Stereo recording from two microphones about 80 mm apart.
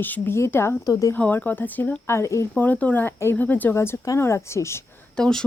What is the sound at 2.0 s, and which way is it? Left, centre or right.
Speech, left.